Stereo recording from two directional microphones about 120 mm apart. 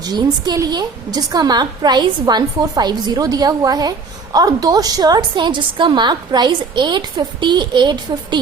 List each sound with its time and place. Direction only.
0.0 s a woman's voice: 35° right (ahead or behind)